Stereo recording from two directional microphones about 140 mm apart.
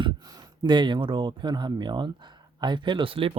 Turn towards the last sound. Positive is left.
turn(degrees=-40)  # may be behind; listen again after turning